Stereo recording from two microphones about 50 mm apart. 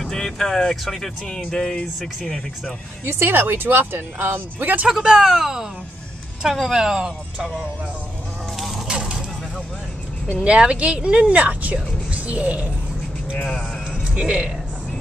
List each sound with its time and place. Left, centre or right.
0.0 s speech: centre
3.1 s speech: right
4.8 s speech: centre
6.7 s speech: centre
8.5 s a sound: centre
8.8 s a sound: centre
10.4 s speech: right
14.1 s speech: right